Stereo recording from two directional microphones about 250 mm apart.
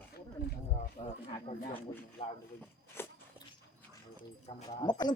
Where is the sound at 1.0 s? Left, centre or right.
Left.